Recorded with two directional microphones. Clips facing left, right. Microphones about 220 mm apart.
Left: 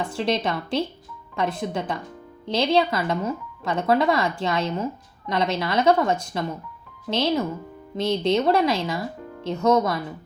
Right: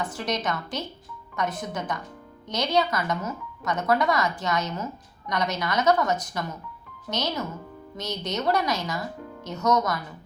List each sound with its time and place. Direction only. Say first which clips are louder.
0.1 s speech: left 5 dB; 30° left (ahead or behind)